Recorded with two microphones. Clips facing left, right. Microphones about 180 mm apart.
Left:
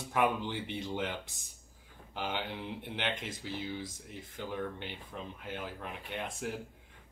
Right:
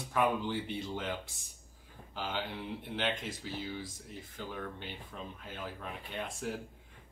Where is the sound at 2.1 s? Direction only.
20° left (ahead or behind).